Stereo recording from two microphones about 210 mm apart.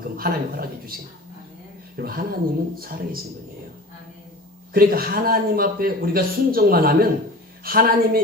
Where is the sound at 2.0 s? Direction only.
45° right (ahead or behind).